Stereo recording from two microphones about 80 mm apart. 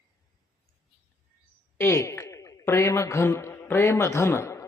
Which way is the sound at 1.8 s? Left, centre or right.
Left.